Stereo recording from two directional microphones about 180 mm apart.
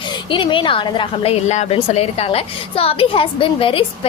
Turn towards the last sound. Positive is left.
turn(degrees=30)  # may be behind; listen again after turning